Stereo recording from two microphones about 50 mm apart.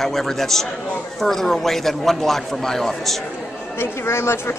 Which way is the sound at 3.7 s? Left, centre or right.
Left.